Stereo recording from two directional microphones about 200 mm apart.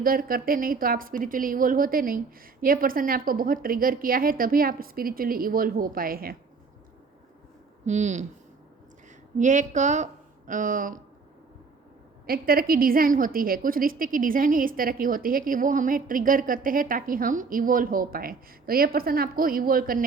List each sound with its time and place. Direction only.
0.0 s a woman's voice: 45° right (ahead or behind)
7.9 s speech: 35° right (ahead or behind)
9.4 s a woman's voice: 40° right (ahead or behind)
12.2 s a woman's voice: 50° right (ahead or behind)